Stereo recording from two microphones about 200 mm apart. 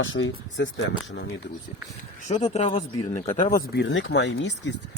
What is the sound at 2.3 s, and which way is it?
Speech, 35° left (ahead or behind).